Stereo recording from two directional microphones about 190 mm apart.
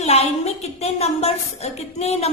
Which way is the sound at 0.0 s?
35° left (ahead or behind).